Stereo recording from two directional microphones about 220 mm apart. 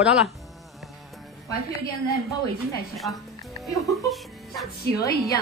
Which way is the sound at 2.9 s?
Centre (ahead or behind).